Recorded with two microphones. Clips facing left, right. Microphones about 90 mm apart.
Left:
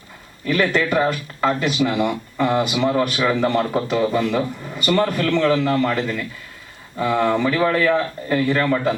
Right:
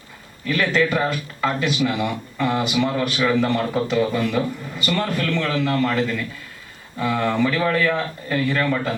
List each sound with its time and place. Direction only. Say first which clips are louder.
0.4 s speech: left 1 dB; 25° left (ahead or behind)